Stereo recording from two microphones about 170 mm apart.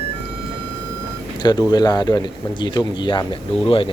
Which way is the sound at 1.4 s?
25° left (ahead or behind).